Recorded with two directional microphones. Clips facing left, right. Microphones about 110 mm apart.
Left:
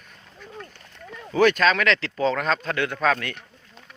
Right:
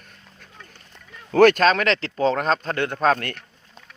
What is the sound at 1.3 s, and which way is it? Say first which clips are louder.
Speech: right 4 dB; 55° right (ahead or behind).